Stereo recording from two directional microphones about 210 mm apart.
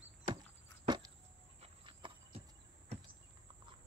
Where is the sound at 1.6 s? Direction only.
25° right (ahead or behind).